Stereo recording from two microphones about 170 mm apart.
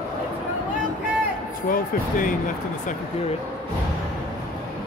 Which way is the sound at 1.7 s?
50° left (ahead or behind).